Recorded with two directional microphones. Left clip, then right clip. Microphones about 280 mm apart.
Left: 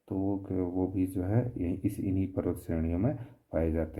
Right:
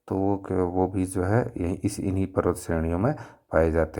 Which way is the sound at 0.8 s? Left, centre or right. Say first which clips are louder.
Right 7 dB; centre.